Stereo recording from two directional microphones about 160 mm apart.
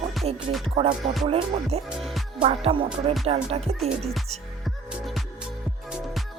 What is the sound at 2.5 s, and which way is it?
Music, 35° right (ahead or behind).